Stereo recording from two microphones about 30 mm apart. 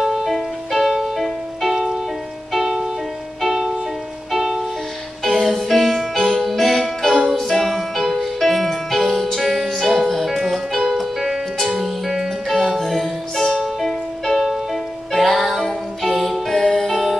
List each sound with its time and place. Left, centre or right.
0.0 s music: centre
4.3 s music: centre
5.2 s music: centre